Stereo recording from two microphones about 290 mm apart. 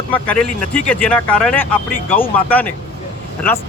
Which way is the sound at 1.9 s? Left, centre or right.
Left.